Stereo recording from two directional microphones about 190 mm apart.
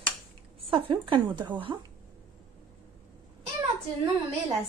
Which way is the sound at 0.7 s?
25° right (ahead or behind).